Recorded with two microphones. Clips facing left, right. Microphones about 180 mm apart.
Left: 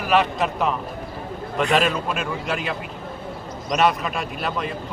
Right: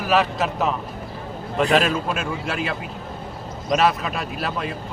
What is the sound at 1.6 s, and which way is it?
Speech, 35° right (ahead or behind).